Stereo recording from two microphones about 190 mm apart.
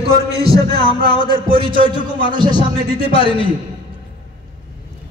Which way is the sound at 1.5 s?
25° right (ahead or behind).